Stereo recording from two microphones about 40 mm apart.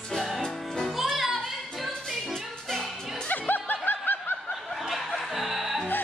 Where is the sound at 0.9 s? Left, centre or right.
Centre.